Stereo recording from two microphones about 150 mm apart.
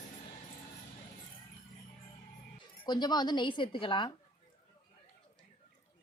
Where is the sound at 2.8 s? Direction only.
30° left (ahead or behind).